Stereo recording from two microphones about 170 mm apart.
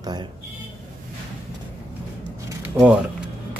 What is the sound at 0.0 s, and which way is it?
Speech, 25° right (ahead or behind).